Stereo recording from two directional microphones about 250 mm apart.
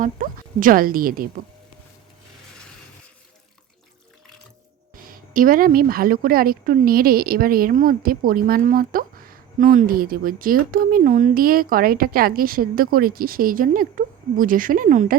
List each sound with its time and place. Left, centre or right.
0.0 s a woman's voice: right
5.0 s a woman's voice: right